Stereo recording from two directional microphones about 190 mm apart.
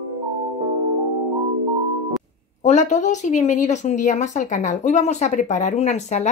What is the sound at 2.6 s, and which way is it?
Speech, 40° left (ahead or behind).